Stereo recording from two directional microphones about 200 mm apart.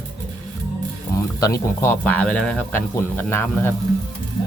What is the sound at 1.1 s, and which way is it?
Sizzle, 15° left (ahead or behind).